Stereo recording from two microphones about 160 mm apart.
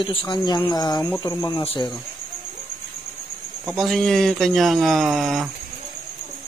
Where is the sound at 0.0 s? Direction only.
30° left (ahead or behind).